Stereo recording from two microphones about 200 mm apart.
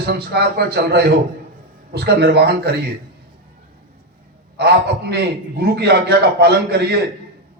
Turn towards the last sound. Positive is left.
turn(degrees=-55)  # may be behind; listen again after turning